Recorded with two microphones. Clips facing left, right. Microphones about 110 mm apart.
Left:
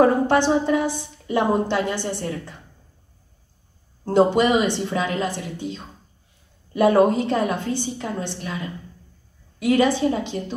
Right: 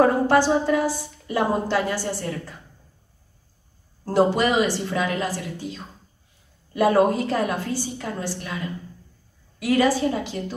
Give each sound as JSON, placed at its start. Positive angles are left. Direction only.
{"t": 0.0, "sound": "a woman's voice", "side_deg": 20}
{"t": 4.0, "sound": "a woman's voice", "side_deg": 20}
{"t": 9.6, "sound": "a woman's voice", "side_deg": 20}